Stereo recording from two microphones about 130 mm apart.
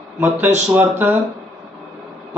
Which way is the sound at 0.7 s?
15° right (ahead or behind).